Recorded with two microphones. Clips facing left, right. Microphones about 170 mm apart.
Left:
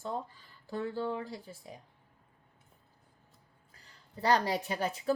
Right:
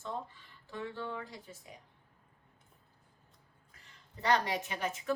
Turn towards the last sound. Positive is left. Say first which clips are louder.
# left 3 dB
turn(degrees=35)  # may be behind; listen again after turning